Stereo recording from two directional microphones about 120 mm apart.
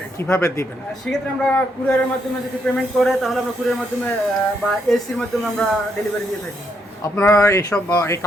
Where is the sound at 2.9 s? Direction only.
Centre (ahead or behind).